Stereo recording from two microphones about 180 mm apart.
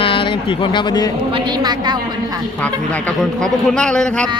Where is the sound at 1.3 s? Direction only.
25° right (ahead or behind).